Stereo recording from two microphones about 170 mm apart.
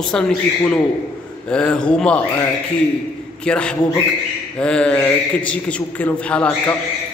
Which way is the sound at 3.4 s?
5° left (ahead or behind).